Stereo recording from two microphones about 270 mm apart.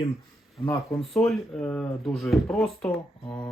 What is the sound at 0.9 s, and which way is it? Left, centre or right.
Speech, centre.